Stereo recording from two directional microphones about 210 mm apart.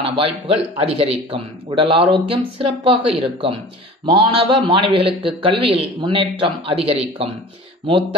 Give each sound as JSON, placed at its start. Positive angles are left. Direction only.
{"t": 0.0, "sound": "speech", "side_deg": -25}